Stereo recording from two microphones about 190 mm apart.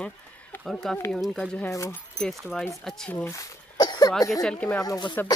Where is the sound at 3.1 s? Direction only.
15° left (ahead or behind).